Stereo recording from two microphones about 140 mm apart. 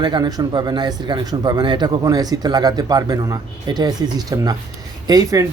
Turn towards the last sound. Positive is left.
turn(degrees=-25)  # may be behind; listen again after turning